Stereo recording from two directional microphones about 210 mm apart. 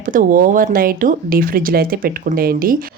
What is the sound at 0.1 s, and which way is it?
Speech, 40° right (ahead or behind).